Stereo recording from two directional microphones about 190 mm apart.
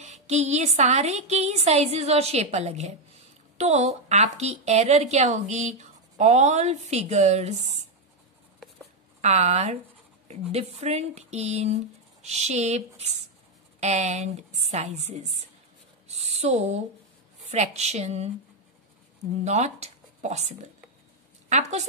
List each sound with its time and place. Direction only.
0.0 s a woman's voice: 35° right (ahead or behind)
9.2 s a woman's voice: 35° right (ahead or behind)
16.1 s a sound: 35° right (ahead or behind)
17.5 s a woman's voice: 35° right (ahead or behind)
19.4 s a woman's voice: 35° right (ahead or behind)